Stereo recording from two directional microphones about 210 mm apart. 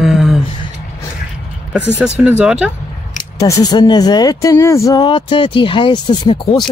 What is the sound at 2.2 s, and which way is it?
Speech, 5° right (ahead or behind).